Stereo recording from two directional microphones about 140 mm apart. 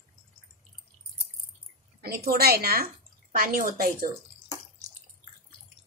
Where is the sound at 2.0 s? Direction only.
90° right.